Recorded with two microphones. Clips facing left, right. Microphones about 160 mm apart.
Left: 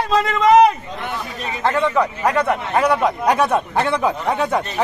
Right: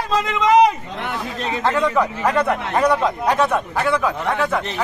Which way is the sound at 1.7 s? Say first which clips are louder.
Left 2 dB; centre (ahead or behind).